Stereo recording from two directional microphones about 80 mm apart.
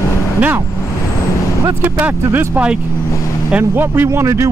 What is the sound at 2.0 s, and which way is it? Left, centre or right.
Speech, right.